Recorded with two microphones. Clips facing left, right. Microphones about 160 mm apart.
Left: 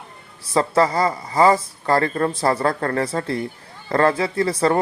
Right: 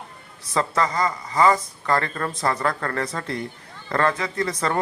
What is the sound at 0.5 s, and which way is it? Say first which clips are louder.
Speech: left 5 dB; 30° left (ahead or behind).